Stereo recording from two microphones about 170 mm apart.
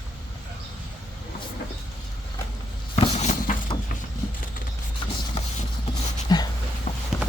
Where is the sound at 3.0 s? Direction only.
40° left (ahead or behind).